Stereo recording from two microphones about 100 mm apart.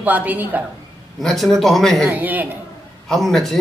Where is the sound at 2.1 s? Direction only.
15° right (ahead or behind).